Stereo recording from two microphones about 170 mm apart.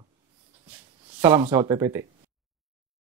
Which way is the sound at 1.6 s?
20° right (ahead or behind).